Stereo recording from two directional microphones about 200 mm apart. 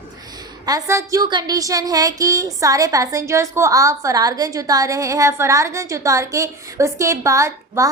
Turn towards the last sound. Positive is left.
turn(degrees=-15)  # may be behind; listen again after turning